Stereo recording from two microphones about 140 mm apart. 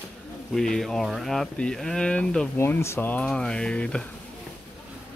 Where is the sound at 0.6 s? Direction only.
5° left (ahead or behind).